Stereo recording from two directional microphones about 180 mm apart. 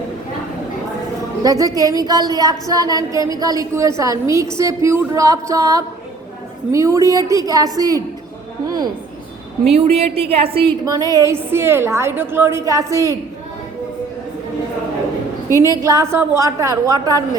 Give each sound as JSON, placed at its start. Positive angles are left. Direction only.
{"t": 1.5, "sound": "a woman's voice", "side_deg": -20}
{"t": 8.6, "sound": "a sound", "side_deg": -20}
{"t": 9.7, "sound": "a woman's voice", "side_deg": -35}
{"t": 10.8, "sound": "a woman's voice", "side_deg": -20}
{"t": 15.6, "sound": "a woman's voice", "side_deg": -20}